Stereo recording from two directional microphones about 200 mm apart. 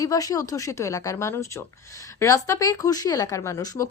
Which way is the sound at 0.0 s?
15° left (ahead or behind).